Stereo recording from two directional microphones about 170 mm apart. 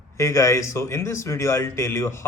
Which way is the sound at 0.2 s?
15° left (ahead or behind).